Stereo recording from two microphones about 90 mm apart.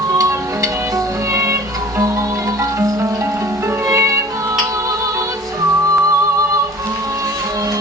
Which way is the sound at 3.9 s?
35° right (ahead or behind).